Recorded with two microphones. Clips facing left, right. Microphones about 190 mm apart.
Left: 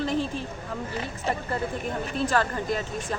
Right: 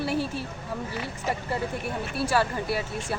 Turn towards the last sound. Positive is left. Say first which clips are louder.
# even
turn(degrees=-10)  # may be behind; listen again after turning